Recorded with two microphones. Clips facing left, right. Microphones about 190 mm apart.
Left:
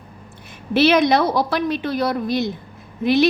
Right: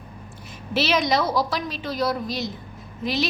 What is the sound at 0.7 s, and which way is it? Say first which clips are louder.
A woman's voice: left 7 dB; 55° left (ahead or behind).